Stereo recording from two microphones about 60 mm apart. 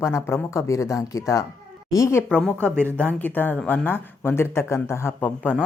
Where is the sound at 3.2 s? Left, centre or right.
Left.